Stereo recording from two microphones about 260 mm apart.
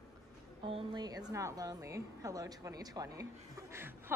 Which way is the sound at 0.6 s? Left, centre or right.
Centre.